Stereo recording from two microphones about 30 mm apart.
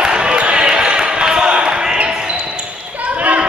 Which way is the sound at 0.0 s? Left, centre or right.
Right.